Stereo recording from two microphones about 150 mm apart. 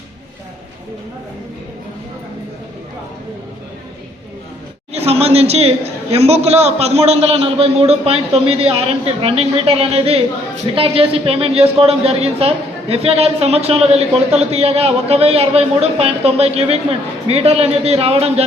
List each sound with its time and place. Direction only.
4.9 s a man's voice: 45° right (ahead or behind)